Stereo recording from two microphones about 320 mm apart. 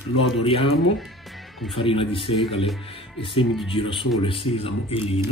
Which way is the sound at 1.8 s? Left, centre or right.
Centre.